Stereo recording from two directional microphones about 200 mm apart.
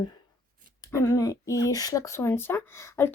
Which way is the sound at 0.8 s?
15° left (ahead or behind).